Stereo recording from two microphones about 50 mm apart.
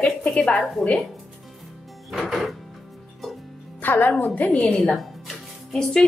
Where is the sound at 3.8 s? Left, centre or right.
Left.